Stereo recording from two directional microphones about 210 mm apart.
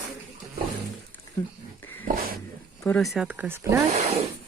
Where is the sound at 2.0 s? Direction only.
45° right (ahead or behind).